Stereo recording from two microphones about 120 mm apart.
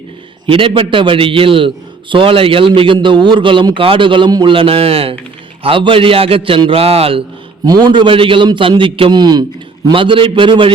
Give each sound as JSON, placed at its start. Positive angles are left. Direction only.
{"t": 0.4, "sound": "a man's voice", "side_deg": -45}
{"t": 7.6, "sound": "a man's voice", "side_deg": -35}